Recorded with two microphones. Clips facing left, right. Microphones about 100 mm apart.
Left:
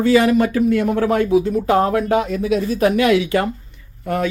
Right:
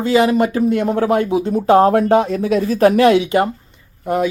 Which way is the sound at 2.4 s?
45° right (ahead or behind).